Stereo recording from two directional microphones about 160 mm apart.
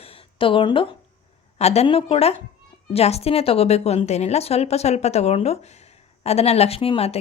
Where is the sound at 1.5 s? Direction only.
40° left (ahead or behind).